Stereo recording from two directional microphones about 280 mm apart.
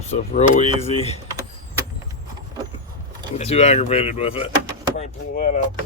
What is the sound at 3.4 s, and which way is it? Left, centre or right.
Speech, left.